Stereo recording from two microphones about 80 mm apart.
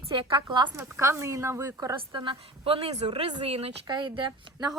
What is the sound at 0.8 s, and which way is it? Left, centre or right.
Speech, right.